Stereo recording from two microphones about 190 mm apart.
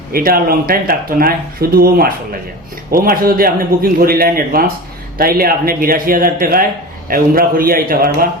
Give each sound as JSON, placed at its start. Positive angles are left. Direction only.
{"t": 0.1, "sound": "a man's voice", "side_deg": -50}